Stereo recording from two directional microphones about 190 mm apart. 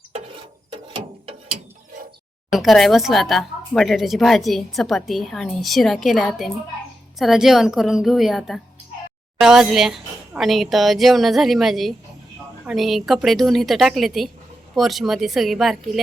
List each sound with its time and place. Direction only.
0.9 s ratchet: 30° right (ahead or behind)
2.5 s speech: centre (ahead or behind)